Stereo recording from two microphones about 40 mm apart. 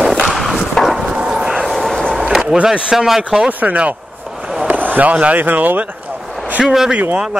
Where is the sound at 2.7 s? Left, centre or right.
Centre.